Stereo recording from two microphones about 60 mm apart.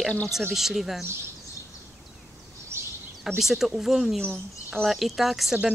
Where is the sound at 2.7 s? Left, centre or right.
Right.